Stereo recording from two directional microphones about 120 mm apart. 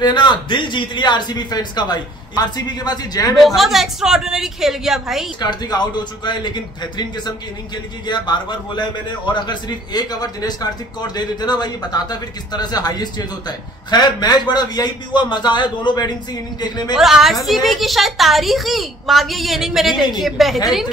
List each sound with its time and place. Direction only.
0.0 s a man's voice: 40° left (ahead or behind)
3.3 s a woman's voice: centre (ahead or behind)
5.4 s a man's voice: 35° left (ahead or behind)
16.9 s a woman's voice: centre (ahead or behind)